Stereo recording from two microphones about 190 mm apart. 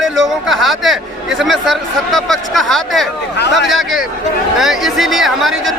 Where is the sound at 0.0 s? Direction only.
Centre (ahead or behind).